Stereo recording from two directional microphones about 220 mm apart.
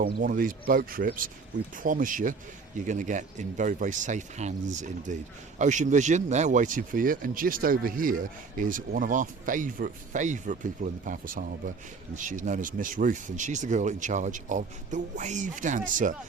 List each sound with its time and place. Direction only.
0.0 s speech: 40° right (ahead or behind)